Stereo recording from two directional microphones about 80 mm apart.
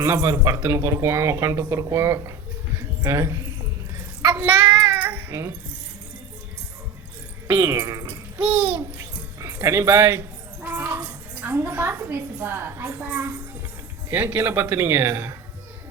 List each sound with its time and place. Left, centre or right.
0.0 s speech: right
0.5 s speech: right
3.0 s speech: right
4.3 s child singing: right
7.4 s speech: right
8.4 s babbling: centre
9.4 s speech: right
10.7 s a sound: right
11.8 s speech: right